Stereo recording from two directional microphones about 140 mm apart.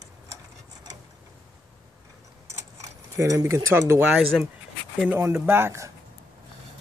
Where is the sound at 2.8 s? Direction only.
20° right (ahead or behind).